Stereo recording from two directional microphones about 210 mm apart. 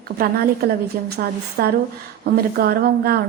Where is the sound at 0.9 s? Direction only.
45° right (ahead or behind).